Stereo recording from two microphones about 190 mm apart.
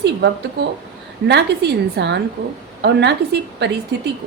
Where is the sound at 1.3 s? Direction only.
60° right (ahead or behind).